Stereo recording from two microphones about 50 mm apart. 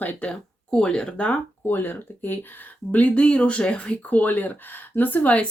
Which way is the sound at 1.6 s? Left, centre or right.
Left.